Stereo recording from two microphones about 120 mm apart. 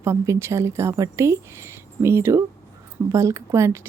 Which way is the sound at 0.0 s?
20° right (ahead or behind).